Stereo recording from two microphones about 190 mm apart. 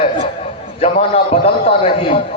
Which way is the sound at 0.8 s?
30° left (ahead or behind).